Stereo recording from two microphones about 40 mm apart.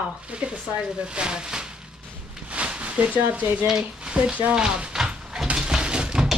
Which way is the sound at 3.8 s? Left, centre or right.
Right.